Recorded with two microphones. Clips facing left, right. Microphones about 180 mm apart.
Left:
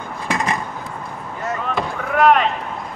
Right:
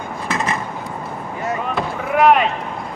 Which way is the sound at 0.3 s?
15° left (ahead or behind).